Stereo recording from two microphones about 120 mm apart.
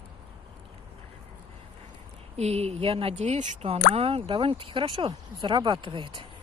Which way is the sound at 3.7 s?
55° right (ahead or behind).